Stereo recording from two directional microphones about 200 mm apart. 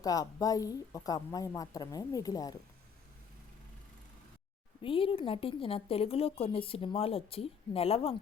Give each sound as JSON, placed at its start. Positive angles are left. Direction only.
{"t": 0.0, "sound": "speech", "side_deg": 20}
{"t": 4.8, "sound": "a woman's voice", "side_deg": 25}